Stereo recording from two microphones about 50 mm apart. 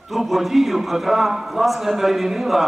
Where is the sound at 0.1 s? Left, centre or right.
Centre.